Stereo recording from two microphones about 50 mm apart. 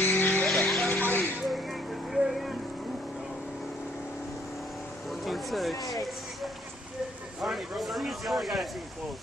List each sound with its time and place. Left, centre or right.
0.0 s vehicle: left
0.5 s music: centre
0.8 s music: left
1.5 s a sound: centre
5.1 s a sound: centre
7.4 s speech: centre